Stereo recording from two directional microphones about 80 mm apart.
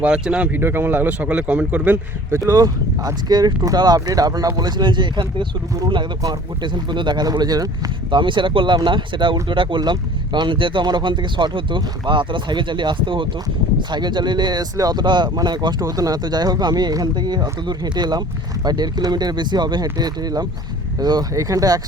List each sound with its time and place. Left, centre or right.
0.0 s speech: centre
0.6 s speech: right
2.5 s speech: right
6.6 s speech: right
8.1 s speech: right
13.9 s speech: right
15.8 s speech: right